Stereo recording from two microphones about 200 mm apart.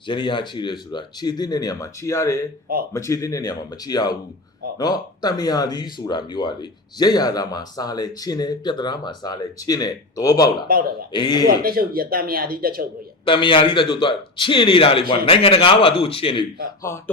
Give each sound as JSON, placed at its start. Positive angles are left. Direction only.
{"t": 0.1, "sound": "speech", "side_deg": 25}
{"t": 10.7, "sound": "speech", "side_deg": -45}
{"t": 11.1, "sound": "speech", "side_deg": 20}
{"t": 11.6, "sound": "speech", "side_deg": -45}
{"t": 13.2, "sound": "speech", "side_deg": 25}
{"t": 16.9, "sound": "speech", "side_deg": 15}